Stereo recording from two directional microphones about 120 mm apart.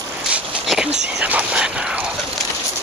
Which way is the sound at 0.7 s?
5° right (ahead or behind).